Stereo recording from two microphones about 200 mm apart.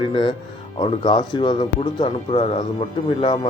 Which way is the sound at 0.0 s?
20° left (ahead or behind).